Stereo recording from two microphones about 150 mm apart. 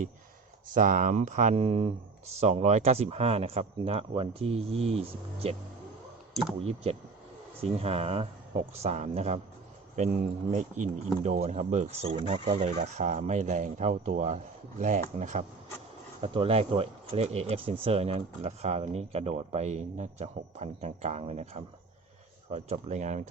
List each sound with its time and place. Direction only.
0.7 s speech: 65° right (ahead or behind); by 5.5 s 40° right (ahead or behind)
6.6 s speech: 45° right (ahead or behind)
16.2 s speech: 35° right (ahead or behind)